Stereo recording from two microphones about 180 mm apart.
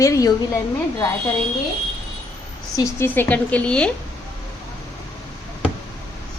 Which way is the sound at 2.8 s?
15° left (ahead or behind).